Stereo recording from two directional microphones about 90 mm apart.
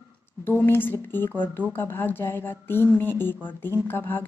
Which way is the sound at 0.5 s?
25° left (ahead or behind).